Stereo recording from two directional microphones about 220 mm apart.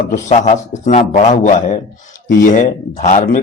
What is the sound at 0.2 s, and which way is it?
A man's voice, 30° left (ahead or behind).